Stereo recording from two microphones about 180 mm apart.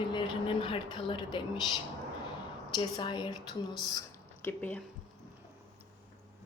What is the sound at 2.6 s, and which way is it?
Speech, 25° left (ahead or behind).